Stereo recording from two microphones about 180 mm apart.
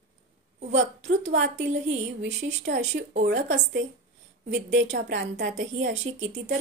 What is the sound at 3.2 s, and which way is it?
A woman's voice, 80° right.